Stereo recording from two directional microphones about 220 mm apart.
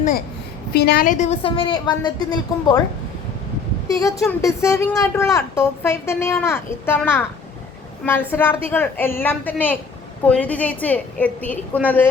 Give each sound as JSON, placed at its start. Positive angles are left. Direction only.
{"t": 0.7, "sound": "a woman's voice", "side_deg": 50}
{"t": 3.9, "sound": "a woman's voice", "side_deg": 15}